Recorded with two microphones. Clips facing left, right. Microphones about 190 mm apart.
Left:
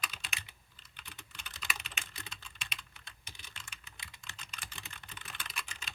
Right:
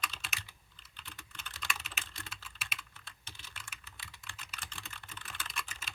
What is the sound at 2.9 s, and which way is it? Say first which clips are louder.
Computer keyboard: right 1 dB; 15° left (ahead or behind).